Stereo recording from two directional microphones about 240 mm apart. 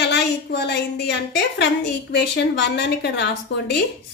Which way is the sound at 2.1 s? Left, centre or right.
Left.